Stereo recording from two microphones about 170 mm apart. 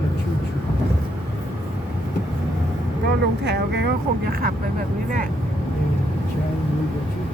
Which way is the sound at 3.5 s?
75° right (ahead or behind).